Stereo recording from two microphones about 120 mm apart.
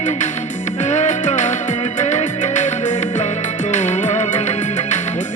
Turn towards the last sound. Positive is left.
turn(degrees=80)